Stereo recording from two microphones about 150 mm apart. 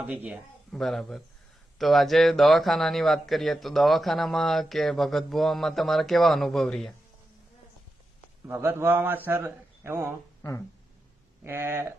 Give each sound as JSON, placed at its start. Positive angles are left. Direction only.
{"t": 0.0, "sound": "a man's voice", "side_deg": -10}
{"t": 0.7, "sound": "a man's voice", "side_deg": 0}
{"t": 8.4, "sound": "a man's voice", "side_deg": -15}
{"t": 11.4, "sound": "a man's voice", "side_deg": -15}